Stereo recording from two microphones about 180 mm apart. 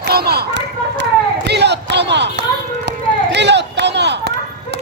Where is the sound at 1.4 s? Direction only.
70° right (ahead or behind).